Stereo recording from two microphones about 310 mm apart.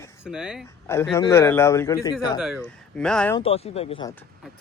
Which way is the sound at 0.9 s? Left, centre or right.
Centre.